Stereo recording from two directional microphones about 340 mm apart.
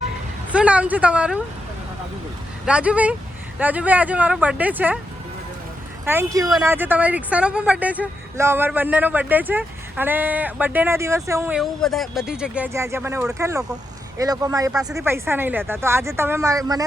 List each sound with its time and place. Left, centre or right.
0.5 s a woman's voice: centre
2.6 s a woman's voice: centre
6.1 s a woman's voice: centre